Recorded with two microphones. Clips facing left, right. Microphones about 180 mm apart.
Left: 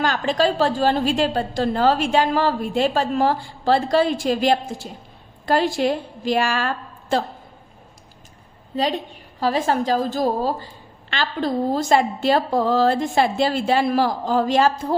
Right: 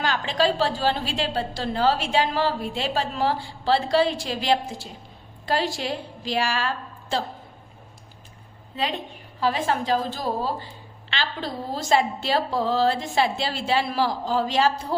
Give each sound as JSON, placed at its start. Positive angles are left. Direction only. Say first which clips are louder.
{"t": 0.0, "sound": "a woman's voice", "louder": "left 4 dB", "side_deg": 45}
{"t": 8.7, "sound": "a woman's voice", "louder": "left 6 dB", "side_deg": 40}